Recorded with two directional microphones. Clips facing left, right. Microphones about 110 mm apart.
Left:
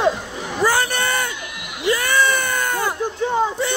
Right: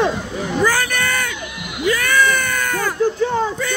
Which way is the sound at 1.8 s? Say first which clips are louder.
Right 1 dB; 25° left (ahead or behind).